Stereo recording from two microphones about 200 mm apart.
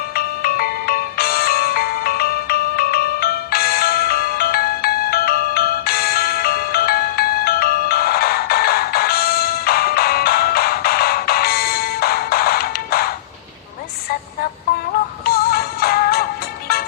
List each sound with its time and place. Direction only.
0.2 s music: 50° left (ahead or behind)
15.2 s music: 50° left (ahead or behind)